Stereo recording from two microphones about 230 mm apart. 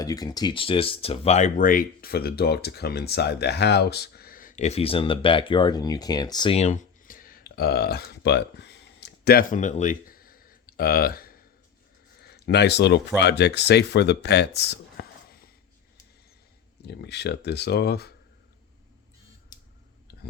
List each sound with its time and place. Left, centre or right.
0.0 s speech: centre; by 15.4 s left
16.8 s speech: left